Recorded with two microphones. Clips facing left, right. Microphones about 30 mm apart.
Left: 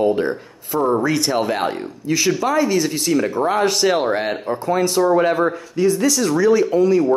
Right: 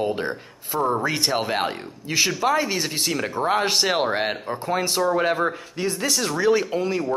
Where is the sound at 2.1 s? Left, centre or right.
Right.